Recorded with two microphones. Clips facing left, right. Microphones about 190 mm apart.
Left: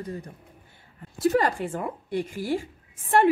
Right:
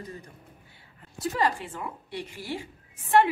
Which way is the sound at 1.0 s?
50° left (ahead or behind).